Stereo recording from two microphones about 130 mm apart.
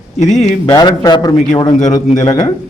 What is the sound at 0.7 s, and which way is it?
A man's voice, 30° left (ahead or behind).